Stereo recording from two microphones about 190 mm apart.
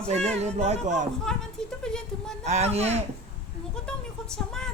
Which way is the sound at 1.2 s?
5° left (ahead or behind).